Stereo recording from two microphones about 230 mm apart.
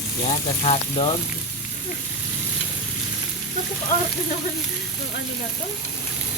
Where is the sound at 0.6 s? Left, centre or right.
Left.